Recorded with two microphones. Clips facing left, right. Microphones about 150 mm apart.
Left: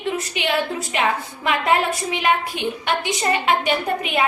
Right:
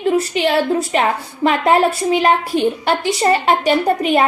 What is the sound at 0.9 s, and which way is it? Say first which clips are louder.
A woman's voice: right 4 dB; 40° right (ahead or behind).